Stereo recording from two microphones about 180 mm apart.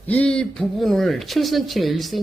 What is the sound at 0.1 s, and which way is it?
Speech, 5° left (ahead or behind).